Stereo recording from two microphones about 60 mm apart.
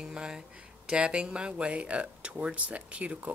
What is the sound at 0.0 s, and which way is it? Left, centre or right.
Speech, centre.